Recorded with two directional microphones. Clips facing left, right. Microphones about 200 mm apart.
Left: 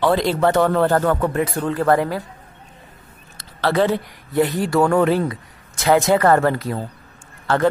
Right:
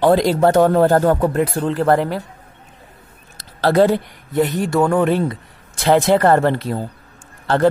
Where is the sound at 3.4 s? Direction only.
40° right (ahead or behind).